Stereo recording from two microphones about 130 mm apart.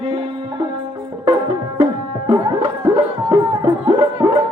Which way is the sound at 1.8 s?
25° right (ahead or behind).